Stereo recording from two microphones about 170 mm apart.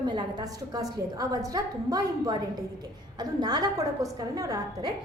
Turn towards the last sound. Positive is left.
turn(degrees=-20)  # may be behind; listen again after turning